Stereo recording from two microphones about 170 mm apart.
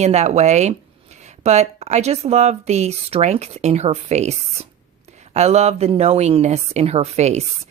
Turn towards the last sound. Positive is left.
turn(degrees=-40)  # may be behind; listen again after turning